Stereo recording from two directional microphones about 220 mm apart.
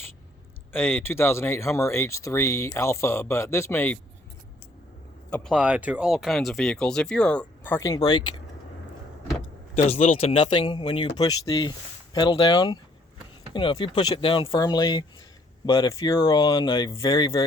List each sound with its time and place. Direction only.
0.7 s speech: 10° left (ahead or behind)
5.3 s speech: centre (ahead or behind); by 8.4 s 20° left (ahead or behind)
9.7 s speech: 30° left (ahead or behind)